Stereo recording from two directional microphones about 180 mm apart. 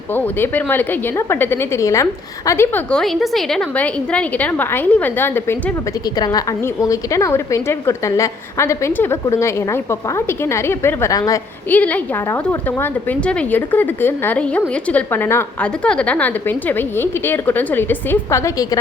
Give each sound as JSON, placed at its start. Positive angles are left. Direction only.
{"t": 0.1, "sound": "a woman's voice", "side_deg": 10}